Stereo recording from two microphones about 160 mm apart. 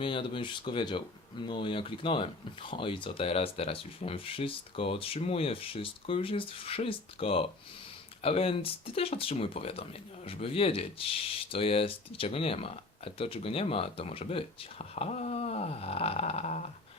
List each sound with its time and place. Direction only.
0.0 s speech: 30° left (ahead or behind)